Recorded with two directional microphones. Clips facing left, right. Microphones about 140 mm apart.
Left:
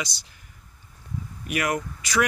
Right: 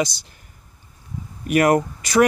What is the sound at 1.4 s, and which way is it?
Speech, 45° right (ahead or behind).